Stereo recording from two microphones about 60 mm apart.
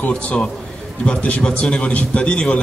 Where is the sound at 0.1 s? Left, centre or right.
Centre.